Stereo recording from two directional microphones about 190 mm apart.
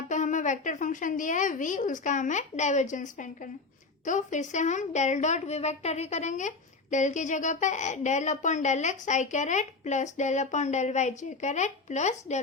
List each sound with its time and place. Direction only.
0.1 s a woman's voice: 40° left (ahead or behind)